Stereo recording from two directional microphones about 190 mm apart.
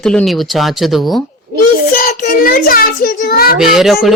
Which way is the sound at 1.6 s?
45° left (ahead or behind).